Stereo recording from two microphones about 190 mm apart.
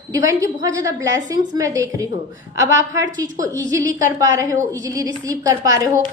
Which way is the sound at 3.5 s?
15° right (ahead or behind).